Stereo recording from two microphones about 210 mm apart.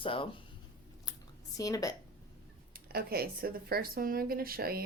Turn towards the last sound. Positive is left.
turn(degrees=-45)  # may be behind; listen again after turning